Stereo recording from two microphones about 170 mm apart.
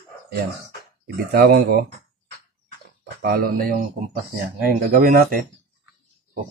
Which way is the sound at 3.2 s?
60° right (ahead or behind).